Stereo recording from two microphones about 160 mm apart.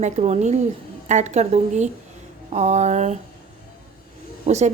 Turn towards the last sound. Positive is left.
turn(degrees=-45)  # may be behind; listen again after turning